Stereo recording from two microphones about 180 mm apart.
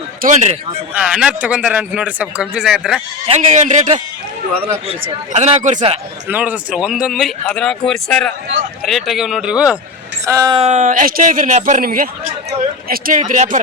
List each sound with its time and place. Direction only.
0.2 s speech: 45° right (ahead or behind)
0.9 s speech: 5° right (ahead or behind)
3.2 s a man's voice: 40° right (ahead or behind)
5.3 s a man's voice: 40° right (ahead or behind)
6.2 s speech: 10° right (ahead or behind)
10.2 s speech: 15° right (ahead or behind)
10.6 s speech: 40° right (ahead or behind)